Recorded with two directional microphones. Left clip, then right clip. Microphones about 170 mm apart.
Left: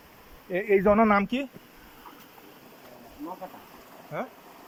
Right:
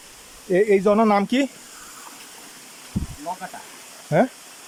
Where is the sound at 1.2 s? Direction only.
55° right (ahead or behind).